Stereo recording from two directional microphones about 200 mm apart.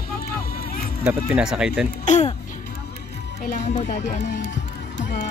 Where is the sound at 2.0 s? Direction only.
35° left (ahead or behind).